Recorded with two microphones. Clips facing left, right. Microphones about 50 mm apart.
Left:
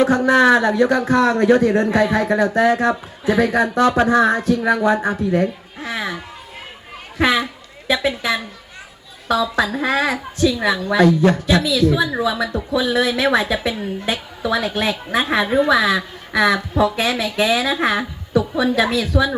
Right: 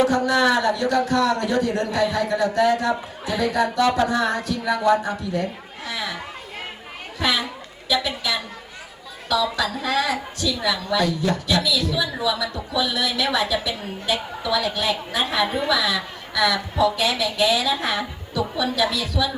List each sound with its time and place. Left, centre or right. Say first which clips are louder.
0.0 s a woman's voice: left 5 dB; left
7.2 s a woman's voice: left 6 dB; left